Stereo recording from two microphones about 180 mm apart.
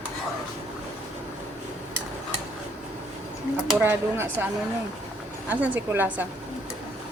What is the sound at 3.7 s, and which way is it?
Speech, 10° right (ahead or behind).